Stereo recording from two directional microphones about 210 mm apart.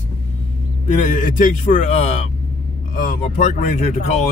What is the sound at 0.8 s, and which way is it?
A man's voice, 35° left (ahead or behind).